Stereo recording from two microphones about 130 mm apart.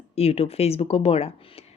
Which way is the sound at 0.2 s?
50° left (ahead or behind).